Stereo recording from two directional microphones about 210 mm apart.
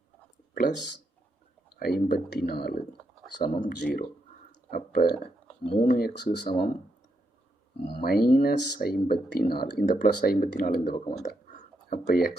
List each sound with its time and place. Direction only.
0.5 s speech: 50° left (ahead or behind)
7.9 s speech: 50° left (ahead or behind)
11.2 s a sound: 40° left (ahead or behind)